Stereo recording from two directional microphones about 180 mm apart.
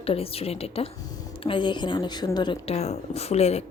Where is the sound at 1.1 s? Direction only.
20° left (ahead or behind).